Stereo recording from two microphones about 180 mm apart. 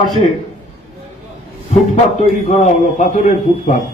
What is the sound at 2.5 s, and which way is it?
A man's voice, 40° left (ahead or behind).